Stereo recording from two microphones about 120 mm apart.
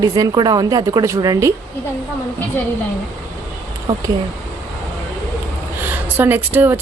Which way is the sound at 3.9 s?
30° right (ahead or behind).